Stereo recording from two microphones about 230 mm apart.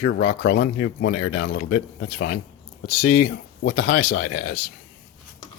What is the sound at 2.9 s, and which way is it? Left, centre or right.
Speech, left.